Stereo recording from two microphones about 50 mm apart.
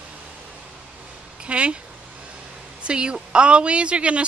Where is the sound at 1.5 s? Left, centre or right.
Right.